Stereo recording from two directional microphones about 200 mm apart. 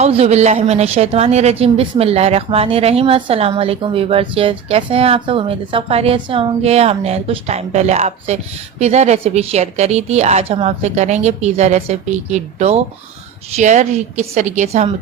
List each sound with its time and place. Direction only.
0.0 s speech: 30° right (ahead or behind)